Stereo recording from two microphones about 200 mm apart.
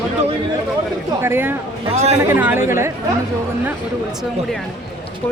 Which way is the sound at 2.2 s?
10° right (ahead or behind).